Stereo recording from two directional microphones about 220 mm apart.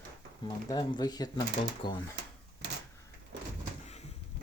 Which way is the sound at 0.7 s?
20° left (ahead or behind).